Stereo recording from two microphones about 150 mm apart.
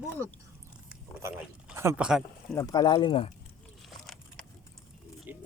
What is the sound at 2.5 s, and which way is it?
Speech, 25° left (ahead or behind).